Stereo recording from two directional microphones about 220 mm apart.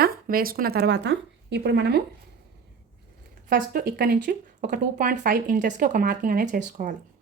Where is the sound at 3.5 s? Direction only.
40° right (ahead or behind).